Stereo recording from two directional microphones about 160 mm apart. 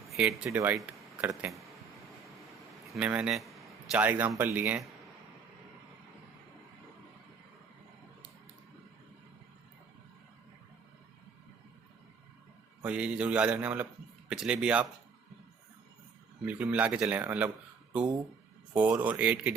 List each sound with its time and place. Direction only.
0.1 s speech: 5° right (ahead or behind)
2.9 s a sound: 10° right (ahead or behind)
4.0 s speech: 10° right (ahead or behind)
12.8 s speech: 10° right (ahead or behind)
16.5 s speech: 10° right (ahead or behind)
18.7 s speech: 10° right (ahead or behind)